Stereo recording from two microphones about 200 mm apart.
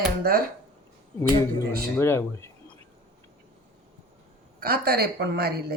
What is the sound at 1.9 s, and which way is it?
Speech, 10° left (ahead or behind).